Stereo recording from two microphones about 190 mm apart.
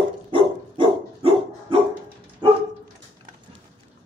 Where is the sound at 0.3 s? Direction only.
25° right (ahead or behind).